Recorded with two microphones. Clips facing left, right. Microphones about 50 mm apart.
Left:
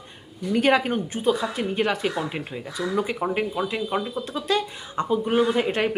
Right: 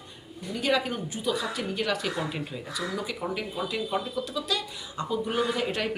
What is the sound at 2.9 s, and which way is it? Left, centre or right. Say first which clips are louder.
Speech: left 10 dB; left.